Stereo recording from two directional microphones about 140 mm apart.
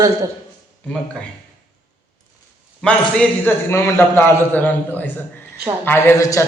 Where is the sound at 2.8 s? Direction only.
10° left (ahead or behind).